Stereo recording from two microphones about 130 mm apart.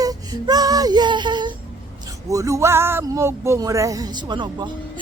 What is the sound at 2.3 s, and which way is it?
Speech, 25° right (ahead or behind).